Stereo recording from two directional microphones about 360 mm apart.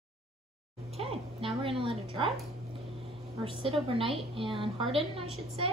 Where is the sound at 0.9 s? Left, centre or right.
Centre.